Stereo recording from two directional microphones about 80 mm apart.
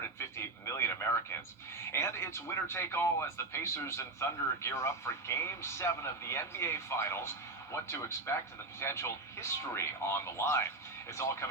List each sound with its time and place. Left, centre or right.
0.3 s radio: left
1.9 s speech: left